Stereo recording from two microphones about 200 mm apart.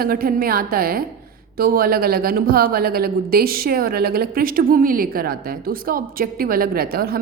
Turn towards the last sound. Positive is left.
turn(degrees=-50)  # may be behind; listen again after turning